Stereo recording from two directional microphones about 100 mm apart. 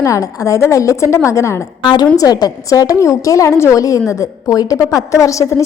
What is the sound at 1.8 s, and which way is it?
A woman's voice, 45° left (ahead or behind).